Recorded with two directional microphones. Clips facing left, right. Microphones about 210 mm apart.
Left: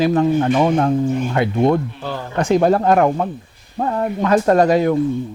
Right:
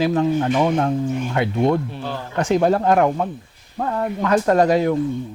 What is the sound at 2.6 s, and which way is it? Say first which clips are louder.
Speech: left 2 dB; 50° left (ahead or behind).